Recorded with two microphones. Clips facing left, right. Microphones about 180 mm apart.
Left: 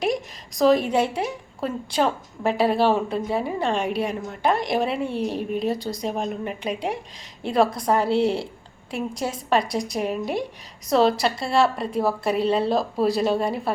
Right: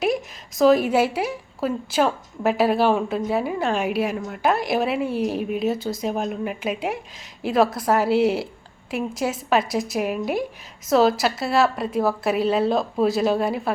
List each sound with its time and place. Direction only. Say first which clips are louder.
0.0 s a woman's voice: right 2 dB; centre (ahead or behind)